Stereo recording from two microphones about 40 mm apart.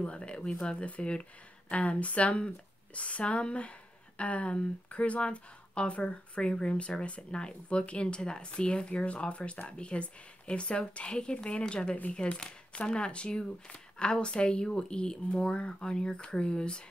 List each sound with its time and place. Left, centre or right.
0.0 s speech: left
6.4 s speech: centre
7.0 s speech: left